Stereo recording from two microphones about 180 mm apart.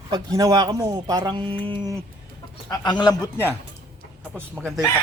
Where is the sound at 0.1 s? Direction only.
20° right (ahead or behind).